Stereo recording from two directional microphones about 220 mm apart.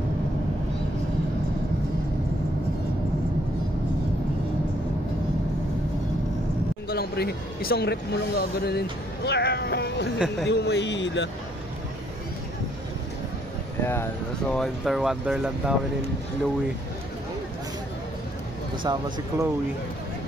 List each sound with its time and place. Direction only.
6.9 s speech: 45° left (ahead or behind)
10.1 s speech: 5° right (ahead or behind)
10.5 s speech: 50° left (ahead or behind)
13.8 s speech: 10° left (ahead or behind)
18.9 s speech: 15° right (ahead or behind)